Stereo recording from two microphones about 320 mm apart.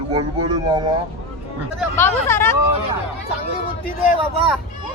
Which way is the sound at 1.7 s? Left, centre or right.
Centre.